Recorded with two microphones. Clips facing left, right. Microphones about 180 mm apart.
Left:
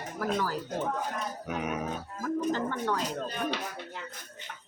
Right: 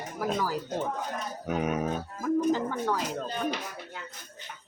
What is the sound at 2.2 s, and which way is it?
Speech, 10° right (ahead or behind).